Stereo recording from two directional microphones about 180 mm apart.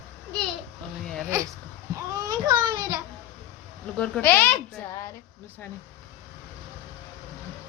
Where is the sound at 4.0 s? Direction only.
10° left (ahead or behind).